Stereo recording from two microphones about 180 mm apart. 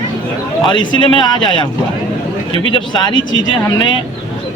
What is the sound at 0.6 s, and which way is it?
A man's voice, 25° left (ahead or behind).